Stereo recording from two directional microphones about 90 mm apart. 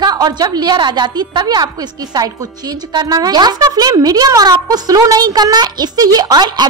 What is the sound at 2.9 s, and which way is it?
Speech, 45° right (ahead or behind).